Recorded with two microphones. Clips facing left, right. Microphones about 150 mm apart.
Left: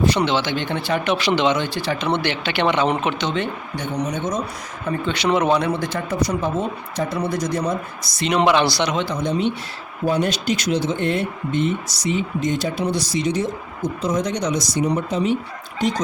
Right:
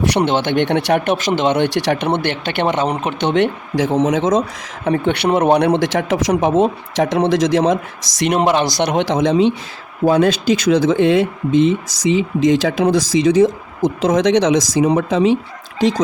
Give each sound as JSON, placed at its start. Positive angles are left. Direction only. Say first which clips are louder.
{"t": 0.0, "sound": "speech", "louder": "right 3 dB", "side_deg": -70}
{"t": 0.3, "sound": "speech", "louder": "right 6 dB", "side_deg": -55}
{"t": 1.0, "sound": "speech", "louder": "right 2 dB", "side_deg": -45}
{"t": 1.5, "sound": "speech", "louder": "right 7 dB", "side_deg": -70}
{"t": 3.2, "sound": "speech", "louder": "right 8 dB", "side_deg": -70}
{"t": 4.9, "sound": "speech", "louder": "right 5 dB", "side_deg": -65}
{"t": 8.3, "sound": "speech", "louder": "right 1 dB", "side_deg": -45}
{"t": 10.9, "sound": "speech", "louder": "right 8 dB", "side_deg": -90}